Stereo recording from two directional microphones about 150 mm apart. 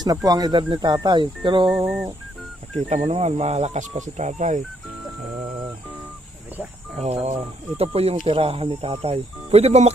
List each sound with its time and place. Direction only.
0.0 s speech: 25° right (ahead or behind)
2.9 s speech: 45° right (ahead or behind)
7.0 s speech: 45° right (ahead or behind)